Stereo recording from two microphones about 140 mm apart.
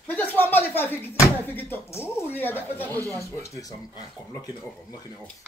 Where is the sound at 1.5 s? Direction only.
15° left (ahead or behind).